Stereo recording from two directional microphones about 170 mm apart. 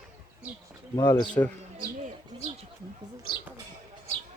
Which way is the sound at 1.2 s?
5° left (ahead or behind).